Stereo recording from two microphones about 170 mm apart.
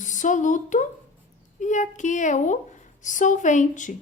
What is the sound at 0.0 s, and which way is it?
A woman's voice, 45° left (ahead or behind).